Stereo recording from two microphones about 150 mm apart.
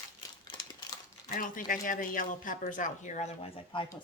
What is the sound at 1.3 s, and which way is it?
Speech, 65° left (ahead or behind).